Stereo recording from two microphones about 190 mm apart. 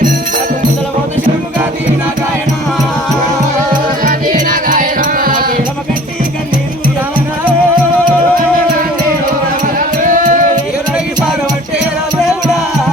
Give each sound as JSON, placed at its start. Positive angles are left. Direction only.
{"t": 4.4, "sound": "music", "side_deg": -45}
{"t": 10.0, "sound": "music", "side_deg": -45}